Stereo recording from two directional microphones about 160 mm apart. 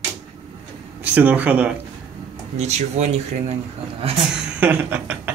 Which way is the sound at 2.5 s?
45° right (ahead or behind).